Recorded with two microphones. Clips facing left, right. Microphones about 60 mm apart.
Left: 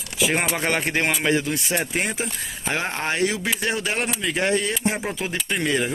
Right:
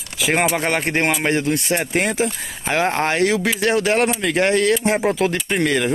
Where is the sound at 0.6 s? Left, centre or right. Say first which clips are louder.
Right 3 dB; right.